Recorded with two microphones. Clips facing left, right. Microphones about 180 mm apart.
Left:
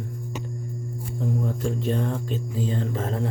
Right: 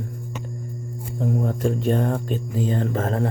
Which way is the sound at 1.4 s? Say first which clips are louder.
Right 4 dB; 50° right (ahead or behind).